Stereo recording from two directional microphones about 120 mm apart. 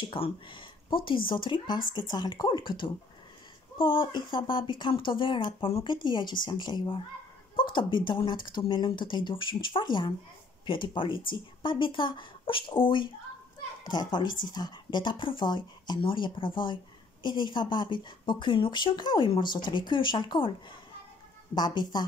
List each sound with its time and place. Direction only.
0.0 s speech: 45° left (ahead or behind)
21.5 s speech: 35° left (ahead or behind)